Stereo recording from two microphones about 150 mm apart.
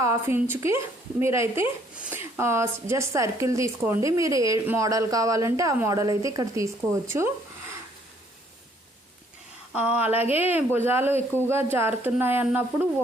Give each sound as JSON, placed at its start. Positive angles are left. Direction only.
{"t": 0.0, "sound": "speech", "side_deg": -20}
{"t": 9.7, "sound": "speech", "side_deg": -10}